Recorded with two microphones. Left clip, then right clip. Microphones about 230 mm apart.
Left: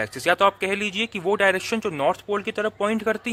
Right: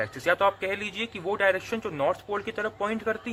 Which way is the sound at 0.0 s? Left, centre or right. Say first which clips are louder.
Left 4 dB; left.